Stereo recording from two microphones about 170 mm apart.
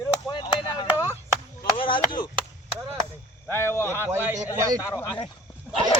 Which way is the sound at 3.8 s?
15° right (ahead or behind).